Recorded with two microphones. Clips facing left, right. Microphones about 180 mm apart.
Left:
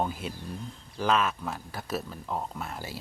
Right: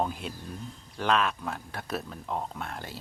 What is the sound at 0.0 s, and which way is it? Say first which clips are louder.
Speech: even; centre (ahead or behind).